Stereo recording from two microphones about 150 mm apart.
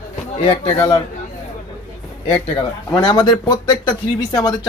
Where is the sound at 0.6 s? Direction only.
25° left (ahead or behind).